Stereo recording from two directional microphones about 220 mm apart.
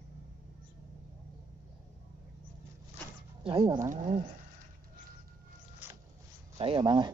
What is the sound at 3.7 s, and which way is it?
Speech, 35° right (ahead or behind).